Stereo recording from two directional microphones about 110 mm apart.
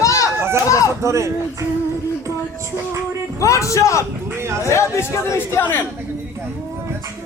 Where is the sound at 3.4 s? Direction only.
30° left (ahead or behind).